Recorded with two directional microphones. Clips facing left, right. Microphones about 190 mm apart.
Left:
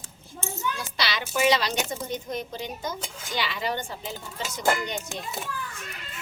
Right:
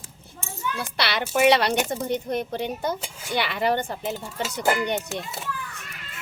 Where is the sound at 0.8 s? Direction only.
60° right (ahead or behind).